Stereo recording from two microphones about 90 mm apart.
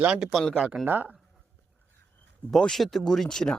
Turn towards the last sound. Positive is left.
turn(degrees=5)  # may be behind; listen again after turning